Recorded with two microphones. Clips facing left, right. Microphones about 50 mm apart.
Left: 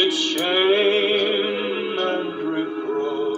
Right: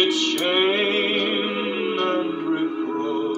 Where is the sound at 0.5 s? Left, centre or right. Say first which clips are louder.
Left 5 dB; left.